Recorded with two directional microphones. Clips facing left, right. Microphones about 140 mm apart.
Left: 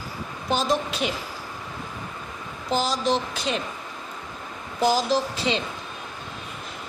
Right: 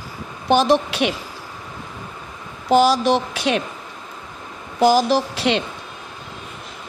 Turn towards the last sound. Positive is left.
turn(degrees=-70)  # may be behind; listen again after turning